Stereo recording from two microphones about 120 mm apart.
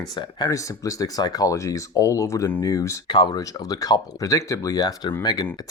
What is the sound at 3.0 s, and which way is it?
Speech, 40° left (ahead or behind).